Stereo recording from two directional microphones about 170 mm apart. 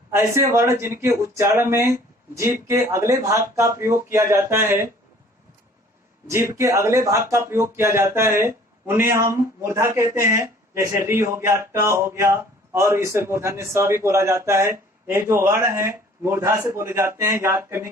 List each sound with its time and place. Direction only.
0.1 s speech: 15° right (ahead or behind)
6.2 s speech: 15° right (ahead or behind)